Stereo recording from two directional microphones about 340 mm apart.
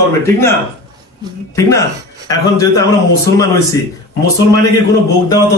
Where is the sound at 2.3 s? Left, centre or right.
Centre.